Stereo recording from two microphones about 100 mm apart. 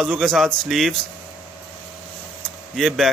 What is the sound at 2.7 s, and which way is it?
Speech, centre (ahead or behind).